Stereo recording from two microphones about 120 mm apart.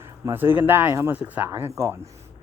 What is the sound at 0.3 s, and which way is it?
Speech, 15° right (ahead or behind).